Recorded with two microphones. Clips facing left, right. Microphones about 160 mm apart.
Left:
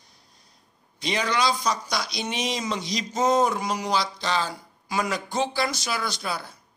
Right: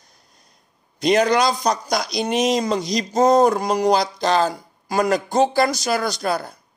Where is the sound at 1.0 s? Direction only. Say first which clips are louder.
Right 8 dB; 45° right (ahead or behind).